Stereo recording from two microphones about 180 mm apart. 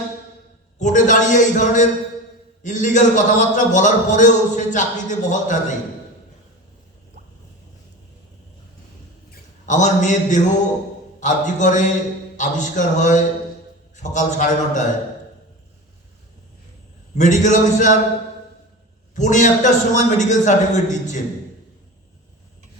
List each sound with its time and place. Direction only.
0.8 s a man's voice: 45° left (ahead or behind)
9.6 s a man's voice: 45° left (ahead or behind)
17.2 s a man's voice: 45° left (ahead or behind)
19.1 s a man's voice: 45° left (ahead or behind)